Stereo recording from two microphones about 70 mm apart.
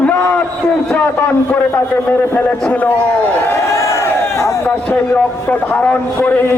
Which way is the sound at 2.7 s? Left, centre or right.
Left.